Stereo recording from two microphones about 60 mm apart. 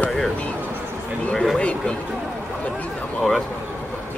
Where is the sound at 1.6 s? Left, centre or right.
Centre.